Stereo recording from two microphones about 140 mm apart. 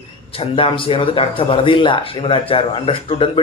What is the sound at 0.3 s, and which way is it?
Speech, 40° left (ahead or behind).